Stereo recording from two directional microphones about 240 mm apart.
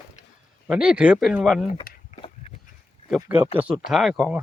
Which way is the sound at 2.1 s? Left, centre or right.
Left.